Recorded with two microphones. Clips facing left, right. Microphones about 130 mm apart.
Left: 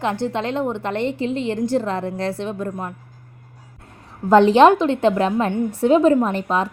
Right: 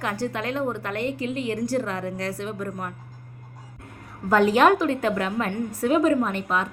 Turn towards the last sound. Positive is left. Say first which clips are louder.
# left 5 dB
turn(degrees=30)  # may be behind; listen again after turning